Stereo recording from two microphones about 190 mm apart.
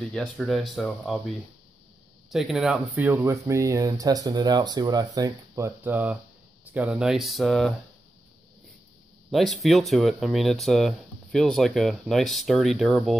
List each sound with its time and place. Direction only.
0.1 s speech: centre (ahead or behind)
2.3 s speech: centre (ahead or behind)
9.3 s speech: centre (ahead or behind)